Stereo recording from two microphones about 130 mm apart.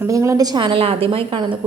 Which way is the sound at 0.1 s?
25° right (ahead or behind).